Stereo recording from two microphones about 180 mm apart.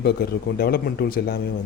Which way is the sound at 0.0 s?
60° left (ahead or behind).